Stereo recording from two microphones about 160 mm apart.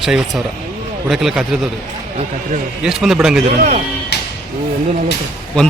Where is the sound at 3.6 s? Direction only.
55° right (ahead or behind).